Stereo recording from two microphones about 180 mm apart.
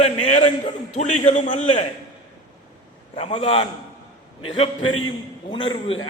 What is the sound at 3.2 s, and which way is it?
Speech, 30° left (ahead or behind).